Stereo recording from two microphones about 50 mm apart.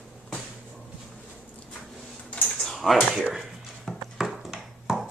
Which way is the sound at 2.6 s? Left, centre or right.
Centre.